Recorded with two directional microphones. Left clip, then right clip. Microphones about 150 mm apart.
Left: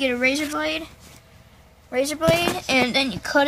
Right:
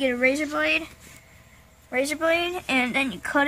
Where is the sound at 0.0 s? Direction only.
20° right (ahead or behind).